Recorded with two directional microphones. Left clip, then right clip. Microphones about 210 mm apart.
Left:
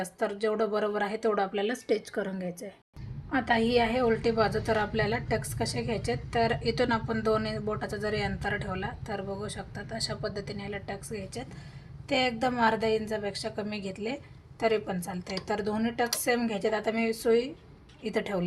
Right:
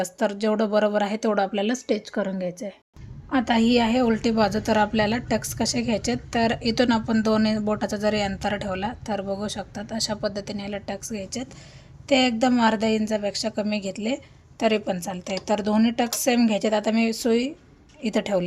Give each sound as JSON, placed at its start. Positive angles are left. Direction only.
{"t": 0.0, "sound": "a woman's voice", "side_deg": -55}
{"t": 1.9, "sound": "a woman's voice", "side_deg": -35}
{"t": 3.2, "sound": "a woman's voice", "side_deg": -50}